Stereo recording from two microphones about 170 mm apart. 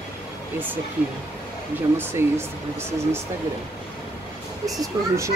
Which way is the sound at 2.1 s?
15° right (ahead or behind).